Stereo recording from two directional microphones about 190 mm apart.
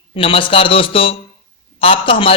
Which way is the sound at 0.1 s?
30° left (ahead or behind).